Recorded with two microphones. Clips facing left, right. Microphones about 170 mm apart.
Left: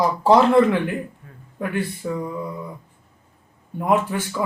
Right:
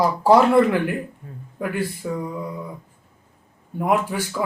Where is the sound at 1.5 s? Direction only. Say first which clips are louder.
Even; 5° right (ahead or behind).